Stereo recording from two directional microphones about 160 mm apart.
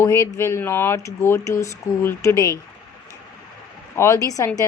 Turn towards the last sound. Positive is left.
turn(degrees=20)  # may be behind; listen again after turning